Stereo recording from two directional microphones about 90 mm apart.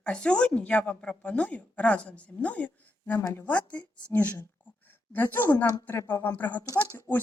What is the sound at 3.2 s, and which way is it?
Speech, 35° left (ahead or behind).